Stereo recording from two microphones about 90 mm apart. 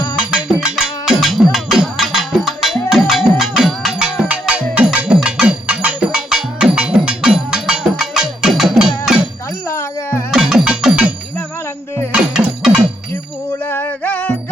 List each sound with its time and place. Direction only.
0.2 s music: 10° right (ahead or behind)
9.6 s music: 30° left (ahead or behind)
10.3 s music: 5° right (ahead or behind)
12.1 s music: 10° right (ahead or behind)
13.7 s music: 25° left (ahead or behind)